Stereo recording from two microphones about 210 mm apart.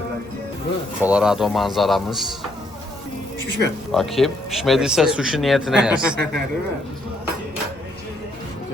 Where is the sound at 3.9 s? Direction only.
Centre (ahead or behind).